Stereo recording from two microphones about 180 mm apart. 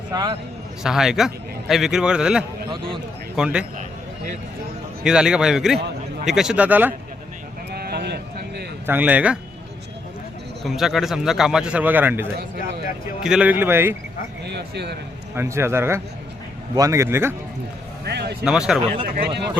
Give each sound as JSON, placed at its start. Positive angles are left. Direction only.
{"t": 0.1, "sound": "a man's voice", "side_deg": -20}
{"t": 0.8, "sound": "a man's voice", "side_deg": -5}
{"t": 5.0, "sound": "a man's voice", "side_deg": -5}
{"t": 7.7, "sound": "sheep", "side_deg": -60}
{"t": 8.9, "sound": "speech", "side_deg": -10}
{"t": 10.6, "sound": "a man's voice", "side_deg": 0}
{"t": 14.4, "sound": "a man's voice", "side_deg": -70}
{"t": 15.4, "sound": "speech", "side_deg": -15}
{"t": 18.0, "sound": "a sound", "side_deg": -65}
{"t": 18.4, "sound": "a man's voice", "side_deg": -5}
{"t": 19.0, "sound": "speech", "side_deg": -60}